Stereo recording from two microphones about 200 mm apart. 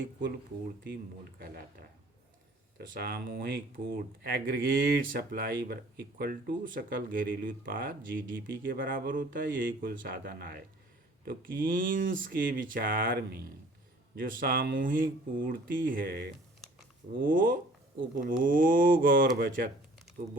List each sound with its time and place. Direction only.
1.4 s speech: 50° right (ahead or behind)